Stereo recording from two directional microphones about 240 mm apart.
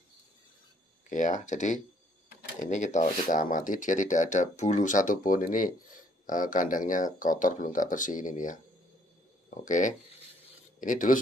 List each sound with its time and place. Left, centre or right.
1.0 s speech: left